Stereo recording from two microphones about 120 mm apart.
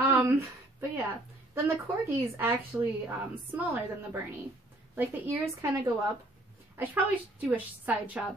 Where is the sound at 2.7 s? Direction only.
20° right (ahead or behind).